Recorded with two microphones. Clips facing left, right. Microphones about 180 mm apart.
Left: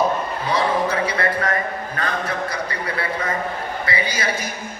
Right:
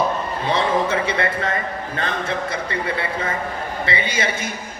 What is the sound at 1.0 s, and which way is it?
Speech, 25° right (ahead or behind).